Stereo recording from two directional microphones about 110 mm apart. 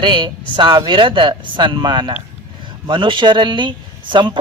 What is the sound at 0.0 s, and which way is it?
Speech, 45° right (ahead or behind).